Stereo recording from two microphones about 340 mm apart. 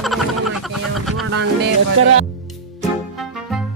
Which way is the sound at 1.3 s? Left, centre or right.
Right.